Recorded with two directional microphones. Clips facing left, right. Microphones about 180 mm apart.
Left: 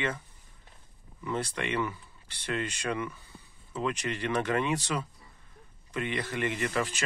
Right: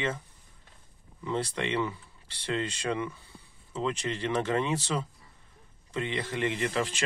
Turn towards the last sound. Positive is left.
turn(degrees=-30)  # may be behind; listen again after turning